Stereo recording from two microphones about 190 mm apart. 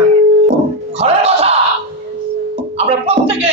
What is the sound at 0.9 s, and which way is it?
Music, 30° right (ahead or behind).